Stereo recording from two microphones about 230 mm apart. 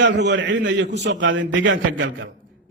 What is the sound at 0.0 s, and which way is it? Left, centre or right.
A man's voice, right.